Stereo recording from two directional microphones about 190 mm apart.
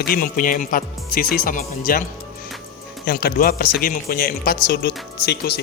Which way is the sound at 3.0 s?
55° left (ahead or behind).